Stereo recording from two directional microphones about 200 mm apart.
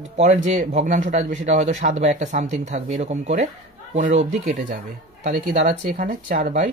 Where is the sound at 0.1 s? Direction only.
35° right (ahead or behind).